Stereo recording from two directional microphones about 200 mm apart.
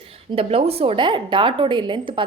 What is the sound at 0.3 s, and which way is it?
A woman's voice, 30° right (ahead or behind).